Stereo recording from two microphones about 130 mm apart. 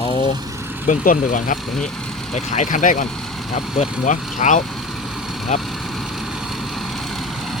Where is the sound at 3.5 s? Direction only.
65° left (ahead or behind).